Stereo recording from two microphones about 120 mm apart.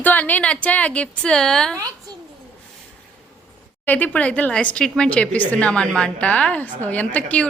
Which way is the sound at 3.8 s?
15° left (ahead or behind).